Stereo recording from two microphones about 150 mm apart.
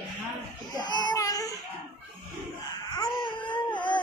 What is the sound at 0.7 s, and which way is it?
Baby cry, 30° left (ahead or behind).